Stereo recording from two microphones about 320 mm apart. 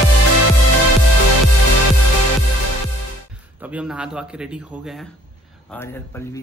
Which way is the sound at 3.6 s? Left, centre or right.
Centre.